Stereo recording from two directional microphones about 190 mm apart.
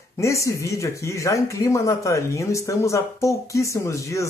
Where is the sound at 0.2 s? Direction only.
15° left (ahead or behind).